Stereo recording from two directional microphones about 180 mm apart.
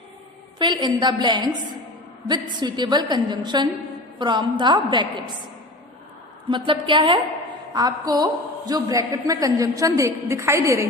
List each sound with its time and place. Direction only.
0.6 s a woman's voice: 25° right (ahead or behind)
6.5 s a woman's voice: 25° right (ahead or behind)